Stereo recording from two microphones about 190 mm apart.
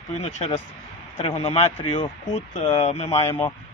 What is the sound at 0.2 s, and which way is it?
Speech, 35° left (ahead or behind).